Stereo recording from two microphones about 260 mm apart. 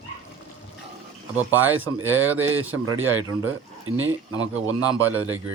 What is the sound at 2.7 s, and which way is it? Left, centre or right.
Speech, right.